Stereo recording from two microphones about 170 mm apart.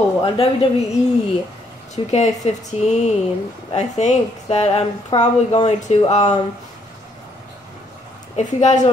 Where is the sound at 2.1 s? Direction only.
40° left (ahead or behind).